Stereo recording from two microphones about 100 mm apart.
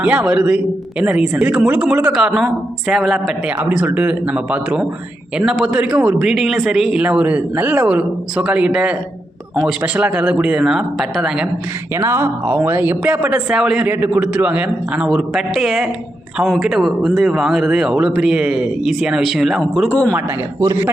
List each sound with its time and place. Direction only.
0.0 s speech: 10° right (ahead or behind)
3.8 s speech: 15° right (ahead or behind)
11.9 s speech: 25° right (ahead or behind); by 19.9 s centre (ahead or behind)
20.6 s a man's voice: 30° right (ahead or behind)